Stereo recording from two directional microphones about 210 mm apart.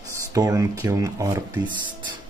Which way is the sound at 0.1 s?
15° right (ahead or behind).